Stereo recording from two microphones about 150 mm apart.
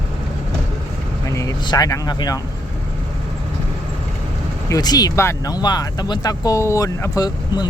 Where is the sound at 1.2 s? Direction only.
20° left (ahead or behind).